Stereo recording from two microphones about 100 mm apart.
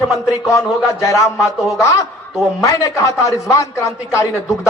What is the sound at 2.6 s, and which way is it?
Speech, 35° left (ahead or behind).